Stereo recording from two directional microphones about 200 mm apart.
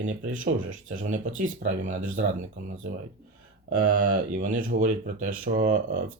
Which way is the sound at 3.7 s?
40° right (ahead or behind).